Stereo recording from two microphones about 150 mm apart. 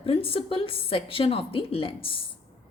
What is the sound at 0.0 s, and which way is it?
A woman's voice, 40° left (ahead or behind).